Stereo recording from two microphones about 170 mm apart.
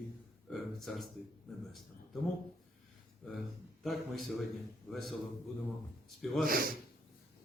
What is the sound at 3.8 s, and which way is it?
Speech, centre (ahead or behind).